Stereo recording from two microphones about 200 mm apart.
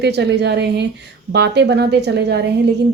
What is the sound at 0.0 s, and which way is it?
A woman's voice, 55° right (ahead or behind).